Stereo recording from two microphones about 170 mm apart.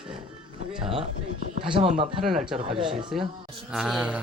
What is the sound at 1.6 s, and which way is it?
Speech, 30° right (ahead or behind).